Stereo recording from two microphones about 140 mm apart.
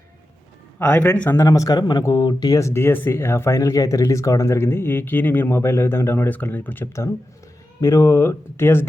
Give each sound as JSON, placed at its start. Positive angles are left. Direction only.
{"t": 0.8, "sound": "speech", "side_deg": 15}
{"t": 1.5, "sound": "speech", "side_deg": 25}